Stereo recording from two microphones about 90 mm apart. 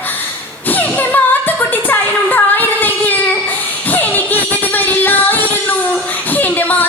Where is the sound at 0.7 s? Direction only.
20° left (ahead or behind).